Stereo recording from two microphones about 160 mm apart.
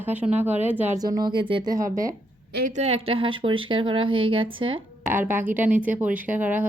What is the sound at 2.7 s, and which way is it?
Speech, 40° right (ahead or behind).